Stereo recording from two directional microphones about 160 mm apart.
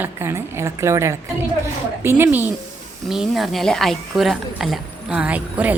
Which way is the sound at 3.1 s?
Centre (ahead or behind).